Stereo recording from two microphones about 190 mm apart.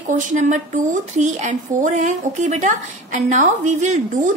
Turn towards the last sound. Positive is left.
turn(degrees=-40)  # may be behind; listen again after turning